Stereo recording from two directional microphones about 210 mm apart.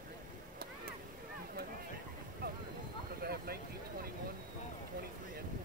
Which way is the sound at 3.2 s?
45° right (ahead or behind).